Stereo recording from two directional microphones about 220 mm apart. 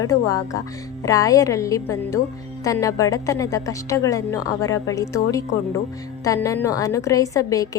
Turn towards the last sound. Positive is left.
turn(degrees=15)  # may be behind; listen again after turning